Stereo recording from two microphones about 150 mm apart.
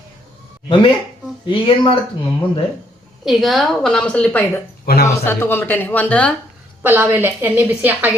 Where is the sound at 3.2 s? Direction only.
Centre (ahead or behind).